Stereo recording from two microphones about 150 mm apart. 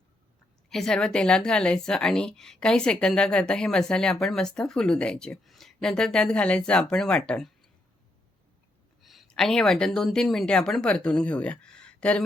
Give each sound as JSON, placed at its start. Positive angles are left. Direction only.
{"t": 0.7, "sound": "a woman's voice", "side_deg": 5}
{"t": 9.0, "sound": "speech", "side_deg": 0}